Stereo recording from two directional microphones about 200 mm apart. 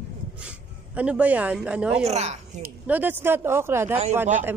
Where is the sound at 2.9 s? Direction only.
10° right (ahead or behind).